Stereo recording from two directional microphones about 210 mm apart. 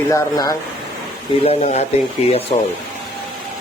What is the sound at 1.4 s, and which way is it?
Speech, 30° left (ahead or behind).